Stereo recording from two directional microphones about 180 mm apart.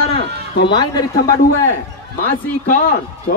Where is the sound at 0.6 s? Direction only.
20° left (ahead or behind).